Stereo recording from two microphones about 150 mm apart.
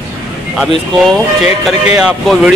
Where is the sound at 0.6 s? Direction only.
Centre (ahead or behind).